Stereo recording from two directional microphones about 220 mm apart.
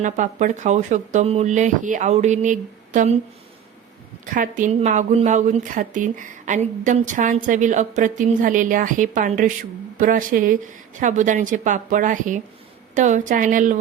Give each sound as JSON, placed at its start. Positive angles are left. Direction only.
{"t": 0.0, "sound": "speech", "side_deg": -35}
{"t": 4.3, "sound": "speech", "side_deg": -35}